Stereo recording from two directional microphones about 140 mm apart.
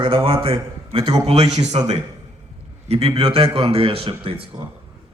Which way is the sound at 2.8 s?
45° right (ahead or behind).